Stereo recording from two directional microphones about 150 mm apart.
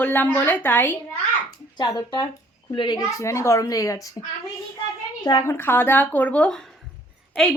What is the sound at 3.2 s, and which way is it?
Speech, 20° left (ahead or behind).